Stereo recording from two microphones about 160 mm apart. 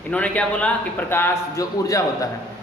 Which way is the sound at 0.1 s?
10° left (ahead or behind).